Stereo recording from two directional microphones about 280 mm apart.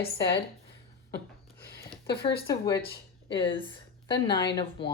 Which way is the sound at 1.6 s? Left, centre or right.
Left.